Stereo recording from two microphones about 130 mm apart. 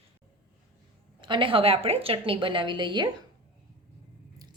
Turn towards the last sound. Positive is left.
turn(degrees=-35)  # may be behind; listen again after turning